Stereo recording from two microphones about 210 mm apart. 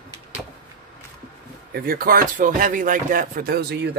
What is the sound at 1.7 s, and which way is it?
Speech, 45° right (ahead or behind).